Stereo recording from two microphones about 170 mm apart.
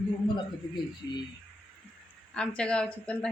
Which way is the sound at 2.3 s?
5° left (ahead or behind).